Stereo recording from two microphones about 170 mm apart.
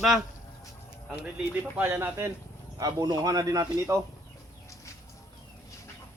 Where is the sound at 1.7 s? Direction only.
10° right (ahead or behind).